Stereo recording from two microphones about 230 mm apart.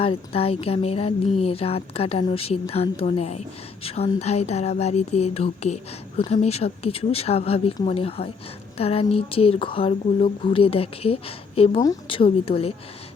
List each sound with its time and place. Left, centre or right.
0.0 s speech: left